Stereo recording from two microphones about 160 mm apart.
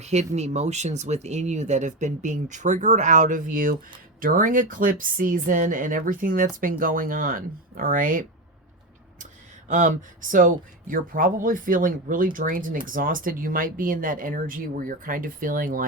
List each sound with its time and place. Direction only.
0.0 s speech: 45° right (ahead or behind); by 8.2 s 60° right (ahead or behind)
9.6 s speech: 55° right (ahead or behind)